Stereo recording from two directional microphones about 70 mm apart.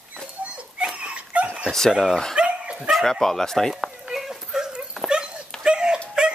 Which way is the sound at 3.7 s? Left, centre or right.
Centre.